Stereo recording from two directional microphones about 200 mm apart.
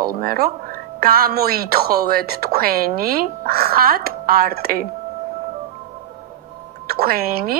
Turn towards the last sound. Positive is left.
turn(degrees=-50)  # may be behind; listen again after turning